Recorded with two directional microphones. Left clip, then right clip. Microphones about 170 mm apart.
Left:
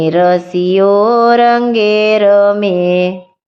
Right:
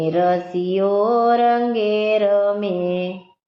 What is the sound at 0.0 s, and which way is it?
Mantra, 35° left (ahead or behind).